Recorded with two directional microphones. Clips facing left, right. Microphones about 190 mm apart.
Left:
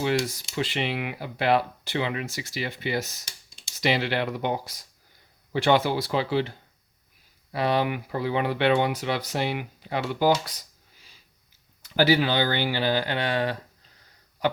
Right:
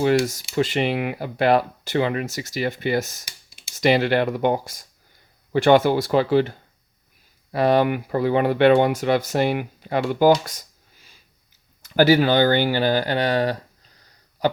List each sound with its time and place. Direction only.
0.0 s speech: 45° right (ahead or behind)
14.4 s throat clearing: 35° right (ahead or behind)